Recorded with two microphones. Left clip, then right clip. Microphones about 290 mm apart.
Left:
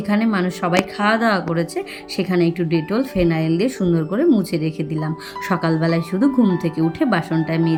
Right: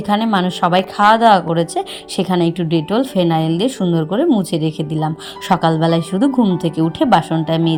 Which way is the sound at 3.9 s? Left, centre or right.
Right.